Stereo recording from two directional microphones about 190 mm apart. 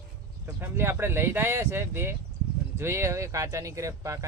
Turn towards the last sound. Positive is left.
turn(degrees=-15)  # may be behind; listen again after turning